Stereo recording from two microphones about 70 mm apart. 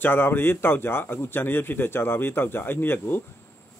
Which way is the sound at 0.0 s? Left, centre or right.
Left.